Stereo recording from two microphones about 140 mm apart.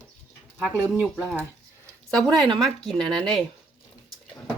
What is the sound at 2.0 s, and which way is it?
Speech, 5° left (ahead or behind).